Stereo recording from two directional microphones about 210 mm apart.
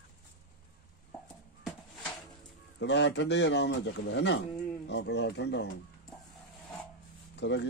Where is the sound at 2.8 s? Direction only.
55° left (ahead or behind).